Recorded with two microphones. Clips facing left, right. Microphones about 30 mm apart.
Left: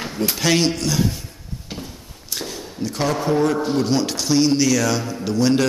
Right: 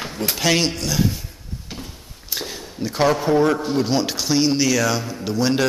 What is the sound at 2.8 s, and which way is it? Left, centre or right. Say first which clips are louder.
A man's voice: right 3 dB; centre.